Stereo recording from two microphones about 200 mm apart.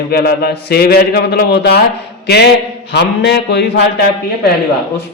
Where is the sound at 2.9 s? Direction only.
55° left (ahead or behind).